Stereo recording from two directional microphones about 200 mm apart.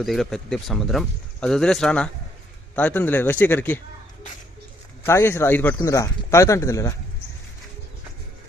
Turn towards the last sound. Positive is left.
turn(degrees=15)  # may be behind; listen again after turning